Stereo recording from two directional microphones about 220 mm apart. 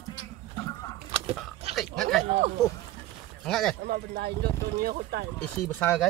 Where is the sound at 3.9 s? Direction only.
45° right (ahead or behind).